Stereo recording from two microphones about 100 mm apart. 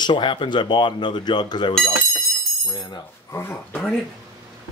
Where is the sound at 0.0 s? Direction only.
55° left (ahead or behind).